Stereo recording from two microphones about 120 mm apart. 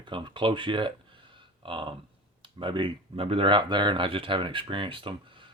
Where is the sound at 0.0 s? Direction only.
40° right (ahead or behind).